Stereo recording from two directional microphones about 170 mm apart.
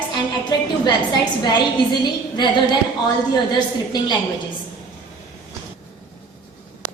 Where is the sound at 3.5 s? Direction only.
25° left (ahead or behind).